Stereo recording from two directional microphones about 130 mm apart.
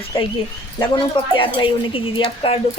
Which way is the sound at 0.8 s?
40° left (ahead or behind).